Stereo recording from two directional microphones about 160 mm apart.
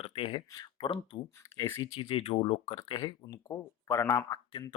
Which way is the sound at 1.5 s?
20° left (ahead or behind).